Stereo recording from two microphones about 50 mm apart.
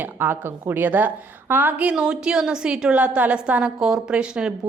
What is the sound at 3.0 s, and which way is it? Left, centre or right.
A woman's voice, right.